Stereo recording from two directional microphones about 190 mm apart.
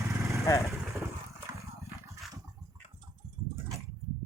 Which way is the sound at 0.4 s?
15° left (ahead or behind).